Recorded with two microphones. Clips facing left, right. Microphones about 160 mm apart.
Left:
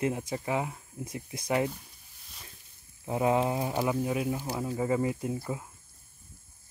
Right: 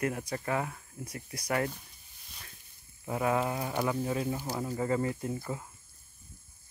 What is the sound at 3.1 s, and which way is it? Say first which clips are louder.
Speech: left 3 dB; 20° left (ahead or behind).